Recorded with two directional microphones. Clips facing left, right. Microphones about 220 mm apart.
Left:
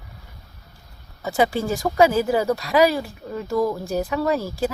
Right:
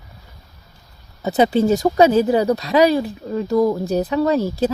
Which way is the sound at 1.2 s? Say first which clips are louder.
Right 6 dB; 20° right (ahead or behind).